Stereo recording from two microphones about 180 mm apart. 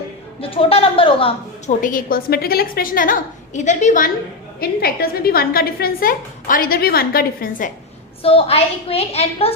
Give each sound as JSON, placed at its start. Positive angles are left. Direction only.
{"t": 0.5, "sound": "a woman's voice", "side_deg": 30}
{"t": 1.8, "sound": "a woman's voice", "side_deg": 50}
{"t": 4.6, "sound": "speech", "side_deg": 55}
{"t": 8.2, "sound": "a woman's voice", "side_deg": 30}